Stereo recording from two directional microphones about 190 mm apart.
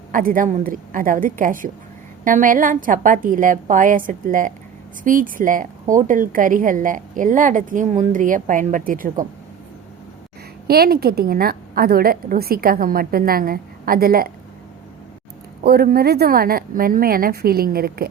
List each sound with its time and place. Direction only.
0.1 s a woman's voice: 45° right (ahead or behind)
10.7 s a woman's voice: 55° right (ahead or behind)
15.6 s a woman's voice: 55° right (ahead or behind)